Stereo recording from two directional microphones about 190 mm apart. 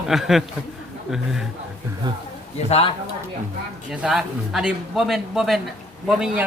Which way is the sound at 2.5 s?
30° left (ahead or behind).